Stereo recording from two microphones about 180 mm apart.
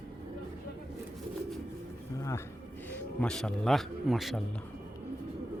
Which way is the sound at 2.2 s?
15° left (ahead or behind).